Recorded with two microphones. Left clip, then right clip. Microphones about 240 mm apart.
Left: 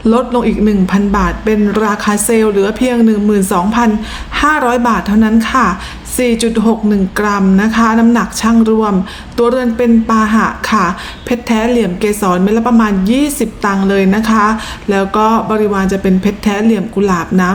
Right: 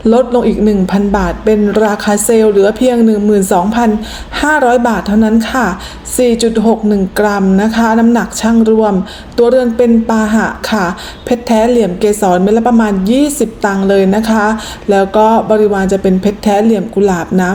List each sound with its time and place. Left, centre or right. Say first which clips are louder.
0.0 s speech: right 3 dB; centre